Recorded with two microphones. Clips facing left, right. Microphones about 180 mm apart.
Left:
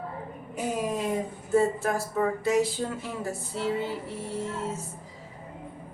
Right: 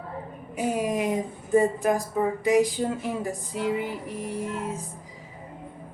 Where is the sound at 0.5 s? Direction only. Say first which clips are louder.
Right 3 dB; 10° right (ahead or behind).